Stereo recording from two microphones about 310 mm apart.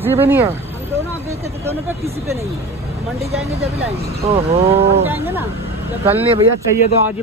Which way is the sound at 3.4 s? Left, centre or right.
Centre.